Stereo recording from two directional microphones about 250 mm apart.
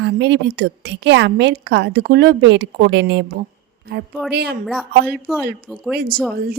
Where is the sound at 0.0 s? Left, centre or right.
Right.